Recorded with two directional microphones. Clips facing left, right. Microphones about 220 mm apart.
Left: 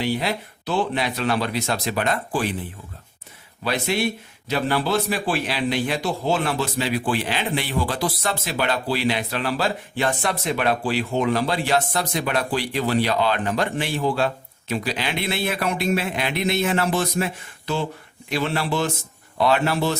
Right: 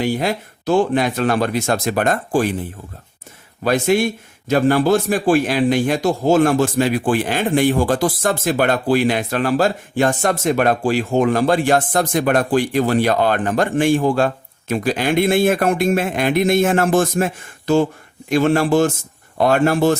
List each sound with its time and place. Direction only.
0.0 s a man's voice: 50° right (ahead or behind)
3.6 s a man's voice: 45° right (ahead or behind)